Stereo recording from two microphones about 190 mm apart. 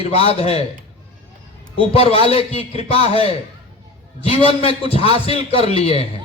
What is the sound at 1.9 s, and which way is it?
A man's voice, 30° left (ahead or behind).